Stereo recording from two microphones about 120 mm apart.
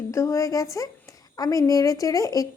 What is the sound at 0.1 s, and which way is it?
A woman's voice, 25° left (ahead or behind).